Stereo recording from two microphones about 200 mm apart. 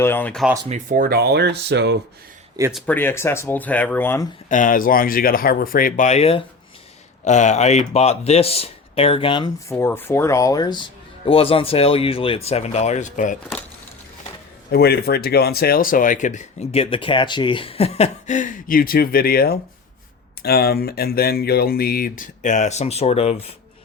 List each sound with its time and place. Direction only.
0.0 s speech: 10° left (ahead or behind)
0.7 s speech: 45° right (ahead or behind); by 2.0 s 60° right (ahead or behind)
2.7 s speech: 10° left (ahead or behind)
4.4 s speech: 40° left (ahead or behind); by 9.7 s 25° left (ahead or behind)
9.7 s speech: 10° left (ahead or behind); by 13.4 s 40° left (ahead or behind)
14.7 s speech: 50° left (ahead or behind); by 23.4 s 30° left (ahead or behind)